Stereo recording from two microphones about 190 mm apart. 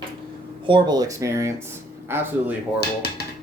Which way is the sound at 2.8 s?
55° left (ahead or behind).